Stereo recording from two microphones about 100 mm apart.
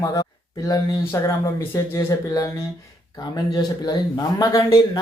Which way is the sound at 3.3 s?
40° left (ahead or behind).